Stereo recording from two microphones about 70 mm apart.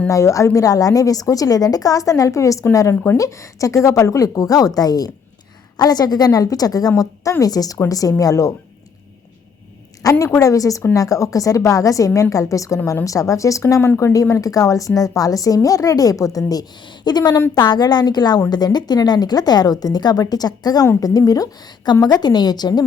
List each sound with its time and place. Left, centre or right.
0.1 s a woman's voice: left
2.9 s speech: left
3.2 s a woman's voice: left
6.9 s a woman's voice: left
10.0 s a woman's voice: left
22.0 s a woman's voice: left